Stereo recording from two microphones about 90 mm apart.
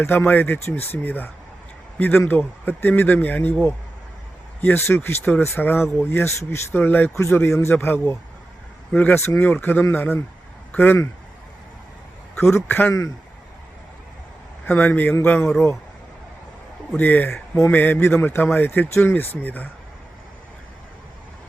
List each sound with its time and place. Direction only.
0.0 s speech: 20° left (ahead or behind)
9.1 s speech: 30° left (ahead or behind)
12.4 s speech: 30° left (ahead or behind)
12.9 s speech: 40° left (ahead or behind)
14.7 s speech: 20° left (ahead or behind)
17.0 s speech: 20° left (ahead or behind)